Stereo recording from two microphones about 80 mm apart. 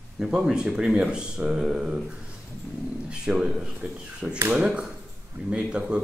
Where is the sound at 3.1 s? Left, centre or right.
Centre.